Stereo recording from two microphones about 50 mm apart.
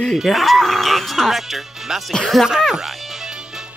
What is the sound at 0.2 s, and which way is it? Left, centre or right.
Speech, centre.